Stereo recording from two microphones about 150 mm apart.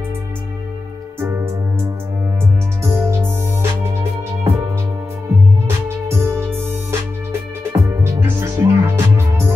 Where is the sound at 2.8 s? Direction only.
20° right (ahead or behind).